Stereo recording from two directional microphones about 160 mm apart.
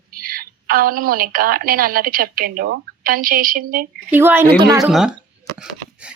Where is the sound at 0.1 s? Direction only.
65° right (ahead or behind).